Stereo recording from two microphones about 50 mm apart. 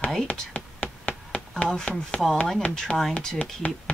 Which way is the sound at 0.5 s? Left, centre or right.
Left.